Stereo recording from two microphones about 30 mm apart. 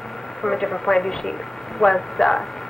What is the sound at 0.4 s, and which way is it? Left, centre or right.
A woman's voice, centre.